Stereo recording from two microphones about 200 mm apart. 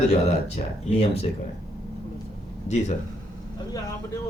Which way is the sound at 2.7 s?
35° left (ahead or behind).